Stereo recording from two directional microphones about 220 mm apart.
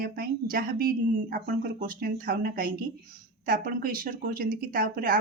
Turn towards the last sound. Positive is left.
turn(degrees=-40)  # may be behind; listen again after turning